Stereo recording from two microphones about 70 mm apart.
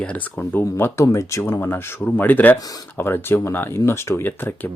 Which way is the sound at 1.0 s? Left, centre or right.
Left.